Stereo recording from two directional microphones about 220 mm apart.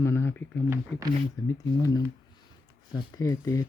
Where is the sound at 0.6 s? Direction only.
10° right (ahead or behind).